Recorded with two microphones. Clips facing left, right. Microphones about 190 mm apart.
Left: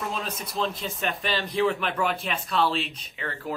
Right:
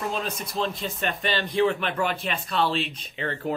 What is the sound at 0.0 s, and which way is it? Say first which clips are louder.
Speech: right 2 dB; centre (ahead or behind).